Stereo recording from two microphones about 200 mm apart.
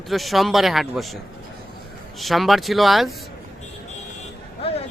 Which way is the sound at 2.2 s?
Centre (ahead or behind).